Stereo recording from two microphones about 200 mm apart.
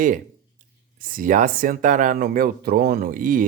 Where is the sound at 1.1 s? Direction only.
40° right (ahead or behind).